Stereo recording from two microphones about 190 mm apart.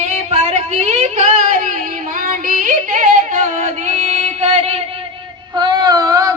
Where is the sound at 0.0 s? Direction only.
40° right (ahead or behind).